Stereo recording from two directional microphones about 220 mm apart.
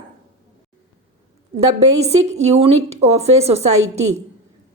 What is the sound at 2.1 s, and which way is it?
A woman's voice, 30° right (ahead or behind).